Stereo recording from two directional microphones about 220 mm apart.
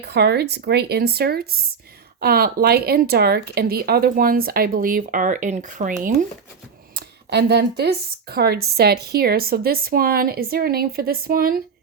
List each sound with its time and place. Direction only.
0.0 s speech: 50° right (ahead or behind)
7.3 s speech: 50° right (ahead or behind)